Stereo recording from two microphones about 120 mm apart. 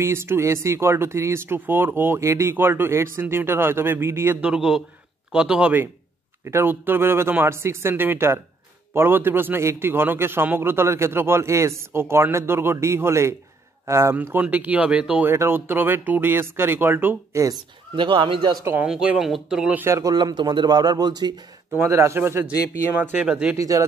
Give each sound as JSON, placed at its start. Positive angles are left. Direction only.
{"t": 0.0, "sound": "a man's voice", "side_deg": -20}
{"t": 4.4, "sound": "a man's voice", "side_deg": -5}
{"t": 15.3, "sound": "speech", "side_deg": -20}
{"t": 17.9, "sound": "speech", "side_deg": -45}
{"t": 18.9, "sound": "speech", "side_deg": -5}
{"t": 19.8, "sound": "speech", "side_deg": -25}
{"t": 21.7, "sound": "a man's voice", "side_deg": -20}
{"t": 23.5, "sound": "a man's voice", "side_deg": -25}